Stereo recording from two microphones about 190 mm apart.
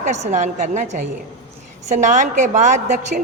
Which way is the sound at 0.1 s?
40° right (ahead or behind).